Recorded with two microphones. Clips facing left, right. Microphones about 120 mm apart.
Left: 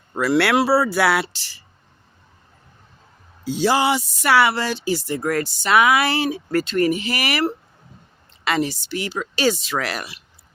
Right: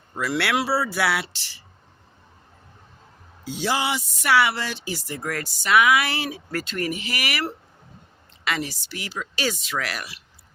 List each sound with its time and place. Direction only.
0.1 s speech: 70° left (ahead or behind)
0.3 s speech: 40° left (ahead or behind)
3.4 s speech: 35° left (ahead or behind)
8.4 s speech: 30° left (ahead or behind)